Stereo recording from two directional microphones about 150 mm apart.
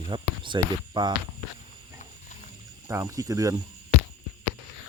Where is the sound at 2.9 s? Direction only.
20° right (ahead or behind).